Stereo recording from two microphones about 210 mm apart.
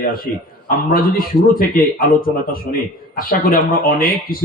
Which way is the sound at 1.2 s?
45° left (ahead or behind).